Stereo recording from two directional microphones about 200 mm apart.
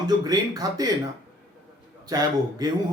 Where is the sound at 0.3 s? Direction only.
20° right (ahead or behind).